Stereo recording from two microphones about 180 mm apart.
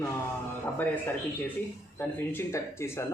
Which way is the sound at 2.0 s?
15° left (ahead or behind).